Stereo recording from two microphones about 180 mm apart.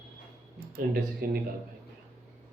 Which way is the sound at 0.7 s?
60° right (ahead or behind).